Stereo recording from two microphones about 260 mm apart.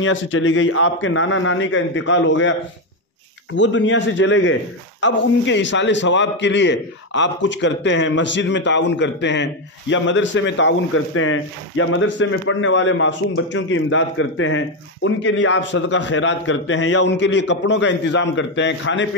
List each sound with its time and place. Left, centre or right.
0.0 s a man's voice: left
3.5 s a man's voice: left